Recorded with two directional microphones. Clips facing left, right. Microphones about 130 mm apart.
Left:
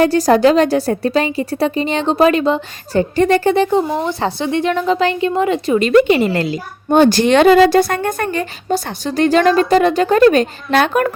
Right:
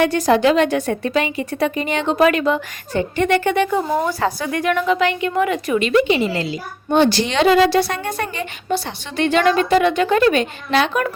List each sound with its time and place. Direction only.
0.0 s a woman's voice: 35° left (ahead or behind)